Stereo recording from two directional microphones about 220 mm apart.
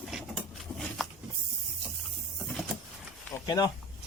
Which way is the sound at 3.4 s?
15° left (ahead or behind).